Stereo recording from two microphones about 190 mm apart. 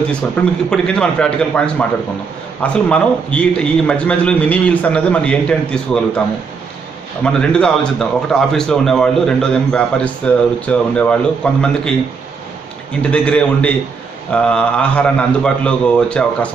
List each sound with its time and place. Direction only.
0.7 s a man's voice: 5° left (ahead or behind)
7.2 s speech: 5° left (ahead or behind)
13.0 s a man's voice: 5° left (ahead or behind)